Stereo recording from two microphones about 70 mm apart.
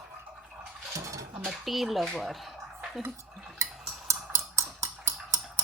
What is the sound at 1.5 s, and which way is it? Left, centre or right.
Speech, centre.